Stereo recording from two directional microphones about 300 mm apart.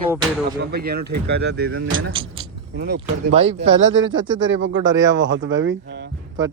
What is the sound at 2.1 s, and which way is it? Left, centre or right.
Speech, centre.